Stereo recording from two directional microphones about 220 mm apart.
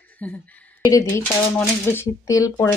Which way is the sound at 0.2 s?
5° left (ahead or behind).